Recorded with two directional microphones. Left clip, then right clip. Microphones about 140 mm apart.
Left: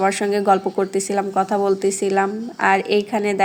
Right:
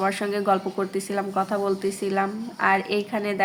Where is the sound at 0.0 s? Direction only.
35° left (ahead or behind).